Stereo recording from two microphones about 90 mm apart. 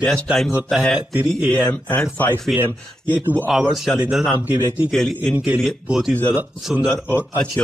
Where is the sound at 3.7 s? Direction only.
Centre (ahead or behind).